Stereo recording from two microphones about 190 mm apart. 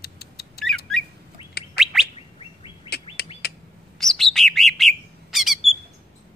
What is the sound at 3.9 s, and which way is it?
Bird, centre (ahead or behind).